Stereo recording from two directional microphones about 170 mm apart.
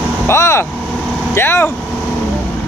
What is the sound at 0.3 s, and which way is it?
Speech, 15° left (ahead or behind).